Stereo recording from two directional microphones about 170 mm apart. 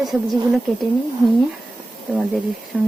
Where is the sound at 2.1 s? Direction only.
Centre (ahead or behind).